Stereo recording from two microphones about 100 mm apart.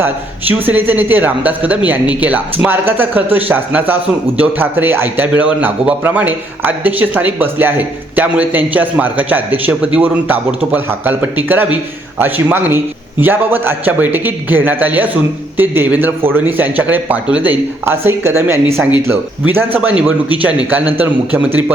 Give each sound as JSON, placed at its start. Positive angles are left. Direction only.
{"t": 0.0, "sound": "a man's voice", "side_deg": -20}